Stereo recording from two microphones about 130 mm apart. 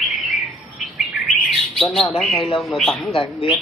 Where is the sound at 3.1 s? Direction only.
45° left (ahead or behind).